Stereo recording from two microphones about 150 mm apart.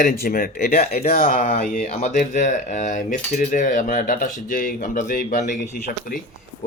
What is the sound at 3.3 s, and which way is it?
Cutlery, 70° left (ahead or behind).